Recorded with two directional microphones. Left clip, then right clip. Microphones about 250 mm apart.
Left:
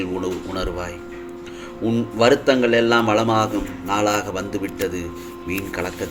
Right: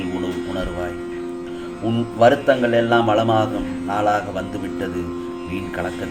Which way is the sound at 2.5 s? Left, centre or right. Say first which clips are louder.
Even; left.